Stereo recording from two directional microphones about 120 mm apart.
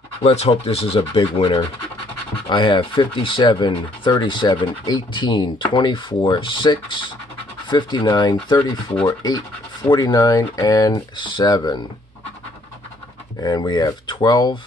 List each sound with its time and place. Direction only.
0.2 s speech: 60° left (ahead or behind); by 11.8 s 35° left (ahead or behind)
13.4 s speech: 35° left (ahead or behind)